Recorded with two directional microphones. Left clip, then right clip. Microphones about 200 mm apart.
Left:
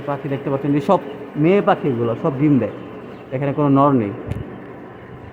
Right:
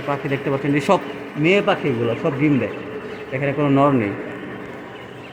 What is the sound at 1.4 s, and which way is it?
A man's voice, 15° left (ahead or behind).